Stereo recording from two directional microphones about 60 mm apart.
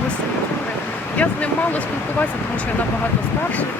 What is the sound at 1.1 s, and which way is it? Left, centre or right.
Speech, left.